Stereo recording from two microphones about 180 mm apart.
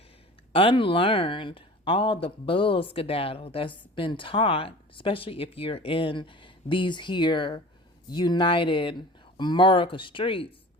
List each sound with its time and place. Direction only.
0.5 s speech: 30° left (ahead or behind)